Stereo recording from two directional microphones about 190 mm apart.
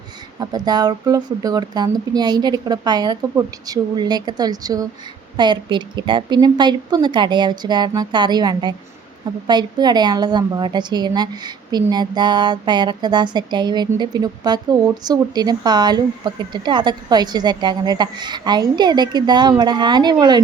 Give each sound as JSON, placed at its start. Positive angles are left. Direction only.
{"t": 0.3, "sound": "a woman's voice", "side_deg": -20}